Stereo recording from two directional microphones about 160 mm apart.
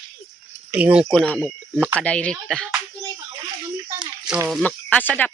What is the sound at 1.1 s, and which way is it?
Speech, 5° left (ahead or behind).